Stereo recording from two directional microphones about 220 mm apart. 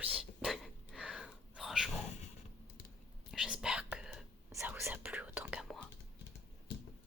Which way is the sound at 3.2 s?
5° right (ahead or behind).